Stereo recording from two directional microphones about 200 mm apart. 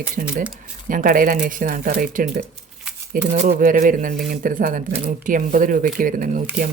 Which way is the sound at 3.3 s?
40° right (ahead or behind).